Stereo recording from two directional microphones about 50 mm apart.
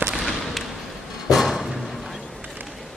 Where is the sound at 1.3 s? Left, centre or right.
Centre.